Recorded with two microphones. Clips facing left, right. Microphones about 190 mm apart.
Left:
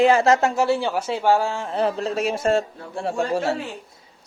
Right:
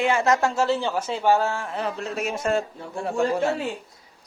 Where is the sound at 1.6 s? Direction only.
35° left (ahead or behind).